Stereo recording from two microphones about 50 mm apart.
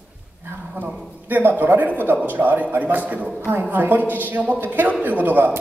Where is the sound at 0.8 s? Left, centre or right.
Right.